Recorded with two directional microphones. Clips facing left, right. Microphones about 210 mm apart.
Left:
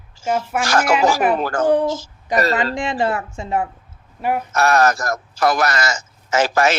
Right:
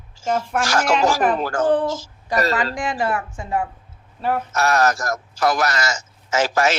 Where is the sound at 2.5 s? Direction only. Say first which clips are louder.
Left 2 dB; 25° left (ahead or behind).